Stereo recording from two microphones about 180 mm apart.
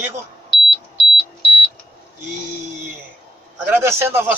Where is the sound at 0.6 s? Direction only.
Centre (ahead or behind).